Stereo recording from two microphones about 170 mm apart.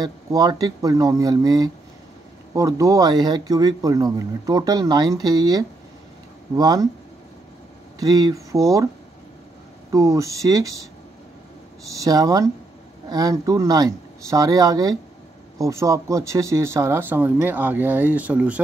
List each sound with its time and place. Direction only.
0.0 s speech: 20° right (ahead or behind)
8.0 s speech: 20° right (ahead or behind)
9.8 s speech: 20° right (ahead or behind)
11.9 s speech: 20° right (ahead or behind)